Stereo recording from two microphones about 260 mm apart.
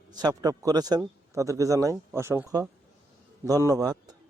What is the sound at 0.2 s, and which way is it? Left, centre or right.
A man's voice, centre.